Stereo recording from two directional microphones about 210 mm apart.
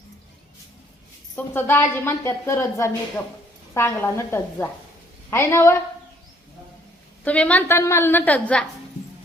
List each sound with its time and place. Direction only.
1.4 s a woman's voice: 10° left (ahead or behind)
7.3 s a woman's voice: 5° left (ahead or behind)